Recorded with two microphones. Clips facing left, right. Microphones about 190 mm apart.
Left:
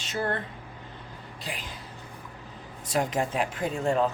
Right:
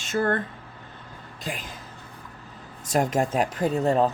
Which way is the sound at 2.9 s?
45° right (ahead or behind).